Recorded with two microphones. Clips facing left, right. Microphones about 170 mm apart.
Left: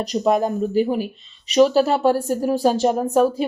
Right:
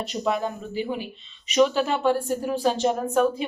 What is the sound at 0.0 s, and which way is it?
Speech, 40° left (ahead or behind).